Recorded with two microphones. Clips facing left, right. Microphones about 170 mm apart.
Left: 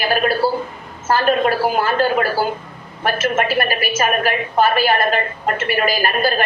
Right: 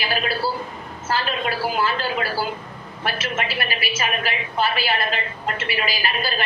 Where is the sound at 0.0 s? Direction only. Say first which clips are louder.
Left 7 dB; 50° left (ahead or behind).